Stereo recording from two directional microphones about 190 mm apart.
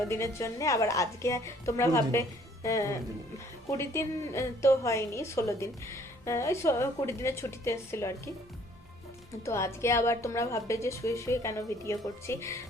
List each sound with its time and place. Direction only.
0.1 s a woman's voice: 15° left (ahead or behind)
9.4 s a woman's voice: 15° left (ahead or behind)